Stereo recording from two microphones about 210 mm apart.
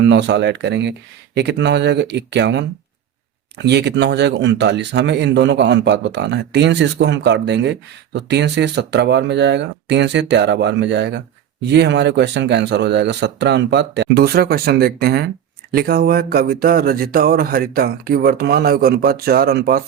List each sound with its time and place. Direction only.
0.0 s speech: 55° right (ahead or behind)